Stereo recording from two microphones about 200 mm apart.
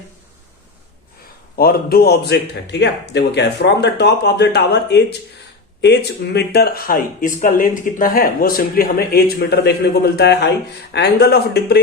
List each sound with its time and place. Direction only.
1.5 s a man's voice: 50° left (ahead or behind)